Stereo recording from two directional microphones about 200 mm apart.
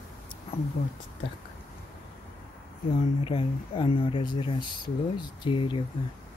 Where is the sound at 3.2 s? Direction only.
25° left (ahead or behind).